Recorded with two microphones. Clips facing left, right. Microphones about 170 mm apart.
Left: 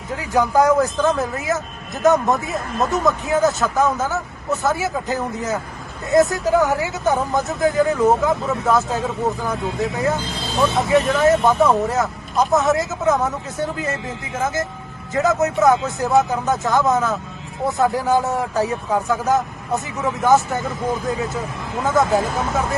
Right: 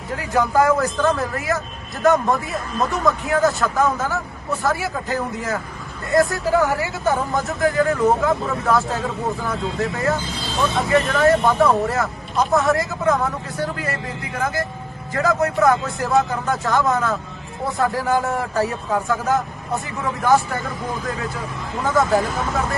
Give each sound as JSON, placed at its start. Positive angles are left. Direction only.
{"t": 0.3, "sound": "speech", "side_deg": 20}
{"t": 0.9, "sound": "speech", "side_deg": 0}
{"t": 1.2, "sound": "speech", "side_deg": 20}
{"t": 7.0, "sound": "speech", "side_deg": 0}
{"t": 7.6, "sound": "speech", "side_deg": 20}
{"t": 8.3, "sound": "speech", "side_deg": 0}
{"t": 8.9, "sound": "speech", "side_deg": 20}
{"t": 11.1, "sound": "speech", "side_deg": 0}
{"t": 11.7, "sound": "speech", "side_deg": 20}